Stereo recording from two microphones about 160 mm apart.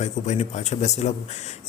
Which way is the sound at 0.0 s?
45° left (ahead or behind).